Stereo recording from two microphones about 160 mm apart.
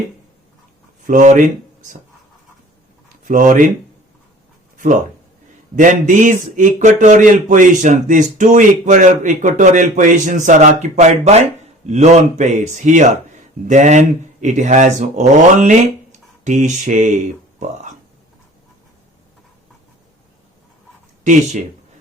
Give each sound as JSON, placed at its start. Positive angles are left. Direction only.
{"t": 1.0, "sound": "speech", "side_deg": -50}
{"t": 3.2, "sound": "a man's voice", "side_deg": -50}
{"t": 5.7, "sound": "a man's voice", "side_deg": -50}